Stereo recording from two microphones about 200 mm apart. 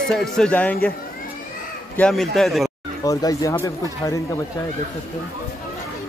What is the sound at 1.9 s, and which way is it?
Speech, 5° left (ahead or behind).